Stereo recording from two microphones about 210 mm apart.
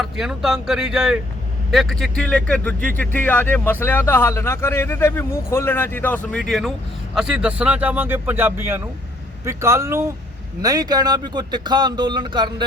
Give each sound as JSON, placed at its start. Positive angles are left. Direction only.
{"t": 0.0, "sound": "a man's voice", "side_deg": 0}